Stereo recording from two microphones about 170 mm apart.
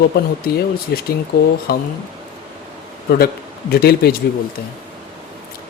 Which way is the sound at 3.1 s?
65° left (ahead or behind).